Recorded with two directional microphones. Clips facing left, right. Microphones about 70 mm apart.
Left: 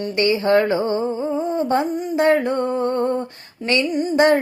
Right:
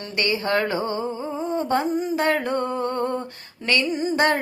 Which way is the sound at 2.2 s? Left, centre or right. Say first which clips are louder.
Left 8 dB; left.